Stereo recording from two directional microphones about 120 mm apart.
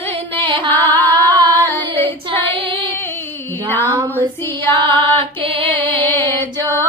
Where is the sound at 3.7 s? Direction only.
15° left (ahead or behind).